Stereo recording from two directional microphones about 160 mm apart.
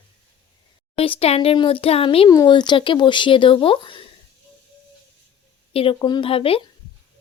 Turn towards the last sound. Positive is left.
turn(degrees=35)  # may be behind; listen again after turning